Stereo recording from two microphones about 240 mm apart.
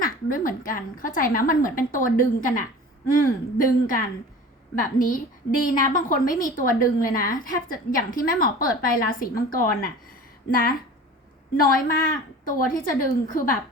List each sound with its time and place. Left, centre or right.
0.0 s a woman's voice: left
11.5 s a woman's voice: left